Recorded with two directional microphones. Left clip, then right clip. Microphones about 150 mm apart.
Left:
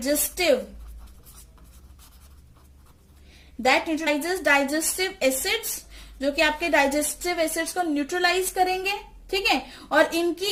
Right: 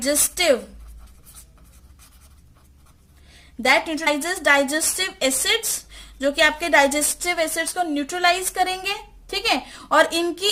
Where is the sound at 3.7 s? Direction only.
45° right (ahead or behind).